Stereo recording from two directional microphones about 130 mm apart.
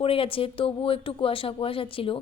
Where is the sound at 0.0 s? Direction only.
45° left (ahead or behind).